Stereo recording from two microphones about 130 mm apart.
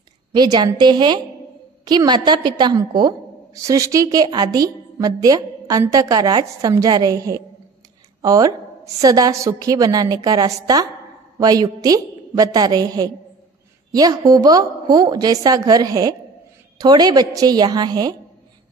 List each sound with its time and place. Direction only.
0.3 s a woman's voice: 35° right (ahead or behind)